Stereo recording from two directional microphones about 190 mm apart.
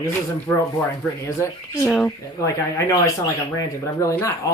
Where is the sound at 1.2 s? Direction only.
15° left (ahead or behind).